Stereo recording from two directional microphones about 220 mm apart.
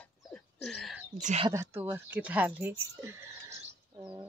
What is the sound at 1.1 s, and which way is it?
Speech, 30° right (ahead or behind).